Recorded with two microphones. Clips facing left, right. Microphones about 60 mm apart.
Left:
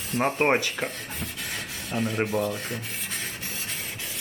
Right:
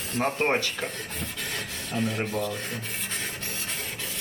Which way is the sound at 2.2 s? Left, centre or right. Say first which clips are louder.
Left 3 dB; centre.